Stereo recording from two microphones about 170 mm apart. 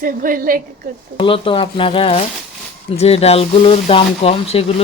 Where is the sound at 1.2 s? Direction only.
30° left (ahead or behind).